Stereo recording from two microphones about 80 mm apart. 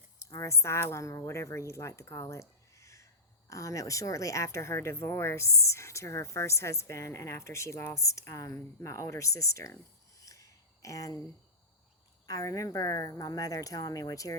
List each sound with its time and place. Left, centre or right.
0.2 s a woman's voice: left
10.2 s a sound: left
12.2 s speech: left